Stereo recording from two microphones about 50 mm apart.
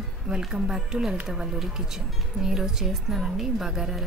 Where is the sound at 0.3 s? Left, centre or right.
Centre.